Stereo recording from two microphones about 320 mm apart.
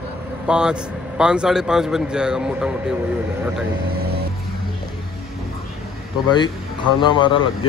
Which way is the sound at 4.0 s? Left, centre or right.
Right.